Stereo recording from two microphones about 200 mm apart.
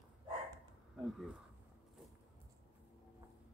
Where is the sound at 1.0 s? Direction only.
Centre (ahead or behind).